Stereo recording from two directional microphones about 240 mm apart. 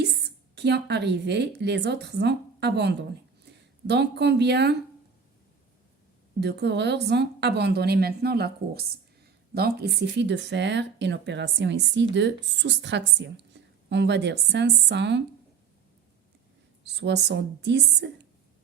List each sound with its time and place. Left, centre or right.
0.5 s a woman's voice: right
6.4 s a woman's voice: right
17.0 s a woman's voice: right